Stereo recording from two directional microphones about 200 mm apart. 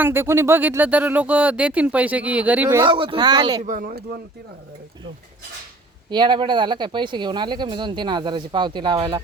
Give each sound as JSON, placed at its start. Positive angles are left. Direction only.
{"t": 0.0, "sound": "speech", "side_deg": -10}
{"t": 2.9, "sound": "speech", "side_deg": -25}
{"t": 3.6, "sound": "speech", "side_deg": -40}
{"t": 6.1, "sound": "speech", "side_deg": -20}